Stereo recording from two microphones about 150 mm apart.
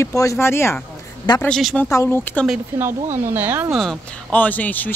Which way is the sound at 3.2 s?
15° right (ahead or behind).